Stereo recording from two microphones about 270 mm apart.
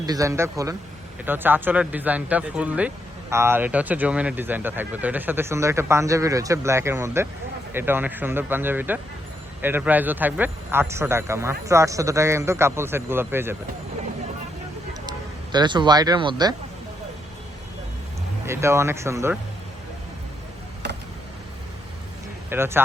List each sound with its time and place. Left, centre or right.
0.0 s speech: centre
15.5 s speech: centre
18.4 s speech: centre
22.4 s speech: centre